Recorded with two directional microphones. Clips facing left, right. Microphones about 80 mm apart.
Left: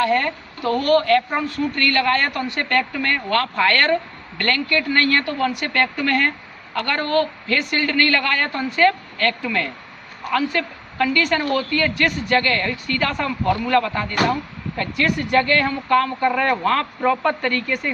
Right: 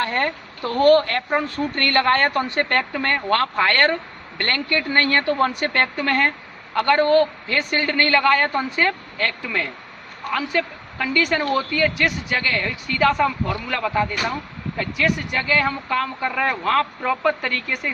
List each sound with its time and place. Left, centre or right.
0.0 s a woman's voice: right; by 17.9 s centre